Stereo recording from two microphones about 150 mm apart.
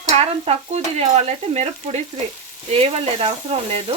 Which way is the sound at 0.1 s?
45° right (ahead or behind).